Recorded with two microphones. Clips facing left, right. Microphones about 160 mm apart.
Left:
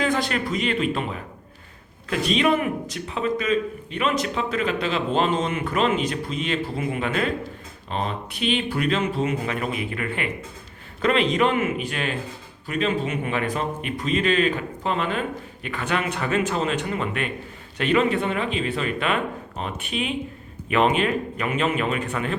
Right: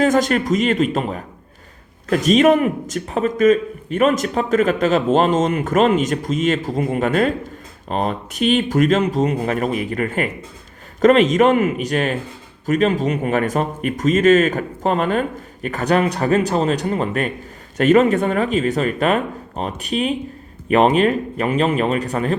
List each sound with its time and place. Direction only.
0.0 s a man's voice: 45° right (ahead or behind)